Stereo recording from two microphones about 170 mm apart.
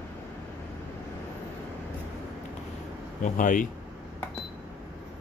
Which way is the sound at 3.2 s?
50° left (ahead or behind).